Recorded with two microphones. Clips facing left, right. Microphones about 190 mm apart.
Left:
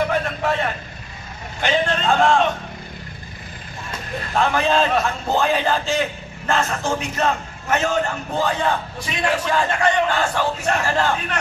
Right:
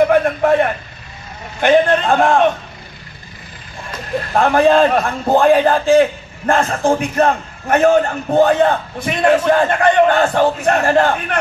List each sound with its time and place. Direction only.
0.0 s vehicle: 55° right (ahead or behind)
1.6 s a man's voice: 55° right (ahead or behind)
4.3 s a man's voice: 50° right (ahead or behind)